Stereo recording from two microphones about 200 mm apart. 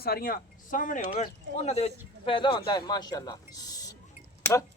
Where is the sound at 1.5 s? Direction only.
30° left (ahead or behind).